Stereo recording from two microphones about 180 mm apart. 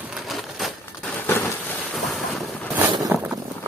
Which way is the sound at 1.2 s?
10° left (ahead or behind).